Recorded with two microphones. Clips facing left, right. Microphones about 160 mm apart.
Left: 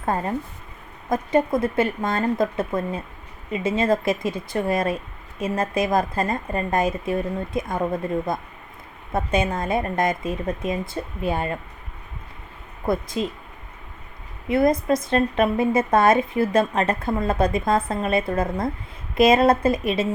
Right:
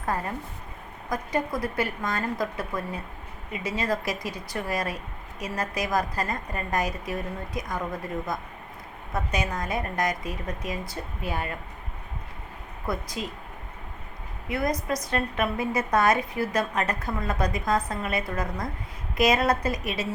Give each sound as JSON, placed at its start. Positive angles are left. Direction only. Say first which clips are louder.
{"t": 0.0, "sound": "speech", "louder": "left 5 dB", "side_deg": 25}
{"t": 12.8, "sound": "speech", "louder": "left 8 dB", "side_deg": 25}
{"t": 14.5, "sound": "speech", "louder": "left 8 dB", "side_deg": 25}